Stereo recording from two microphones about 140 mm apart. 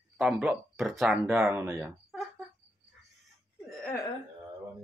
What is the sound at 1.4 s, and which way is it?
Speech, 20° right (ahead or behind).